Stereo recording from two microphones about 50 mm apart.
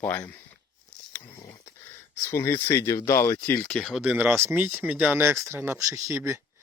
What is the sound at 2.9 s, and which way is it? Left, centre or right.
Speech, left.